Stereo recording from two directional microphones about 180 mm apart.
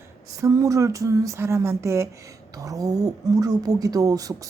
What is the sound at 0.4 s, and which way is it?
A woman's voice, 20° right (ahead or behind).